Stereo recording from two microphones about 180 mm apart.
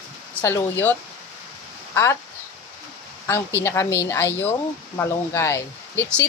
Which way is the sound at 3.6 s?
15° left (ahead or behind).